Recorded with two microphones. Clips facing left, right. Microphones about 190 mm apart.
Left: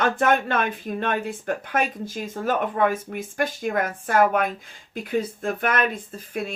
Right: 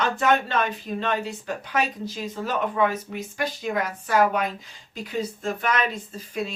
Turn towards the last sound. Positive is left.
turn(degrees=55)  # may be behind; listen again after turning